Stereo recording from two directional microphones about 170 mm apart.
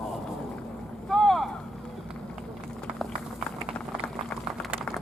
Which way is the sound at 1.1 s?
Centre (ahead or behind).